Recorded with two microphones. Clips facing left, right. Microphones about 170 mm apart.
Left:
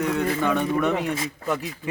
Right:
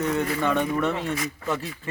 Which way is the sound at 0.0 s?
10° left (ahead or behind).